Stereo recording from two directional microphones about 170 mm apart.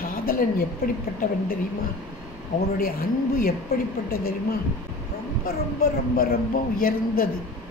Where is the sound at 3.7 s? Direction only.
65° left (ahead or behind).